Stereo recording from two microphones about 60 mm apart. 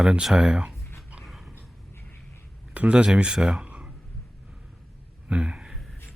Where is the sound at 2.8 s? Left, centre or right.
Centre.